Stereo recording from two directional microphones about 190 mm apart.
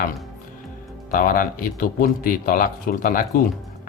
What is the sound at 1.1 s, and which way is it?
Speech, 45° left (ahead or behind).